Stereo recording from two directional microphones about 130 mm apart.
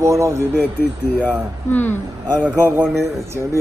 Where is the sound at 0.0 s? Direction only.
25° right (ahead or behind).